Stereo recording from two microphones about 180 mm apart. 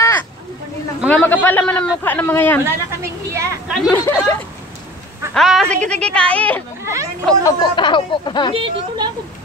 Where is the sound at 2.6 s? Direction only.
15° right (ahead or behind).